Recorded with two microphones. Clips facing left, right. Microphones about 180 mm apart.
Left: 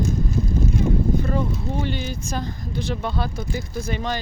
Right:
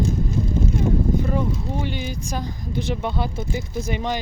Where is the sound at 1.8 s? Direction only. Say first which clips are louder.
Left 1 dB; 10° right (ahead or behind).